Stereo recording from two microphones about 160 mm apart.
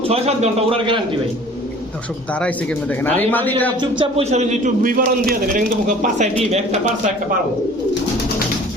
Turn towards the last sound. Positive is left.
turn(degrees=-50)  # may be behind; listen again after turning